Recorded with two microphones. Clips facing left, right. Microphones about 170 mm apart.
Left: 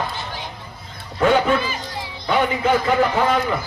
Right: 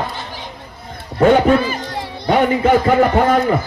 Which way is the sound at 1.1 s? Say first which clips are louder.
Right 5 dB; 45° right (ahead or behind).